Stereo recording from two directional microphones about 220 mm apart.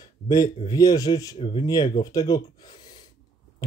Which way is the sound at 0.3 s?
15° left (ahead or behind).